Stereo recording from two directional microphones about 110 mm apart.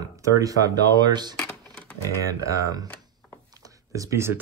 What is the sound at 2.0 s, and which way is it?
Speech, 30° right (ahead or behind).